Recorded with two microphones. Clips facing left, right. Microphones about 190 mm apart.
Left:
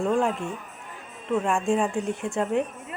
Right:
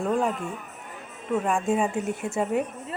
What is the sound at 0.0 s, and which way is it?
Speech, centre (ahead or behind).